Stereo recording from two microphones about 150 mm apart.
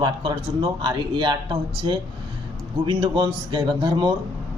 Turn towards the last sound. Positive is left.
turn(degrees=-30)  # may be behind; listen again after turning